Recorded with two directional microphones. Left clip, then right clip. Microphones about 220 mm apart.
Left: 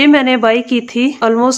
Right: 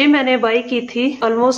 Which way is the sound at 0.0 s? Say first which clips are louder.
Left 4 dB; 45° left (ahead or behind).